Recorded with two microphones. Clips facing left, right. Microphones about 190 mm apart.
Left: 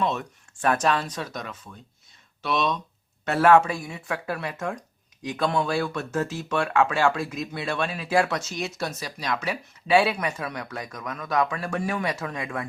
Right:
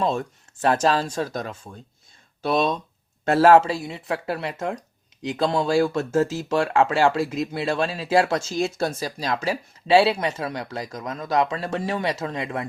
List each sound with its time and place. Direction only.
0.0 s speech: 30° right (ahead or behind)